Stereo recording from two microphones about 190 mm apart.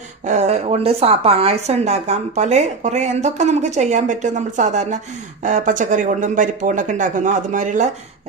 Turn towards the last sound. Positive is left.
turn(degrees=-40)  # may be behind; listen again after turning